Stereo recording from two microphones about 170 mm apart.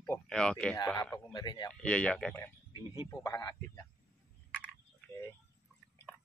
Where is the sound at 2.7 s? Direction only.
25° left (ahead or behind).